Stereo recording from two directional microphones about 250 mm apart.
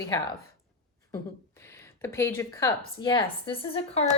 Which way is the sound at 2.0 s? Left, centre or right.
Centre.